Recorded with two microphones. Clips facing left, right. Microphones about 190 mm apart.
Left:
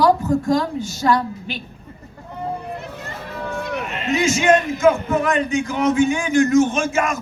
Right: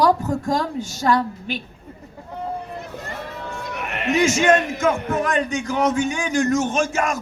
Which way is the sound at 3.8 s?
65° right (ahead or behind).